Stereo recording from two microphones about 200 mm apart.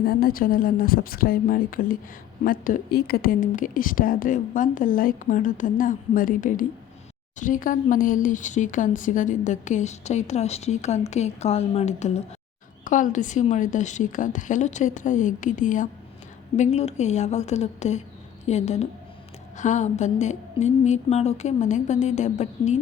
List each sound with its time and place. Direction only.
0.0 s speech: 50° left (ahead or behind)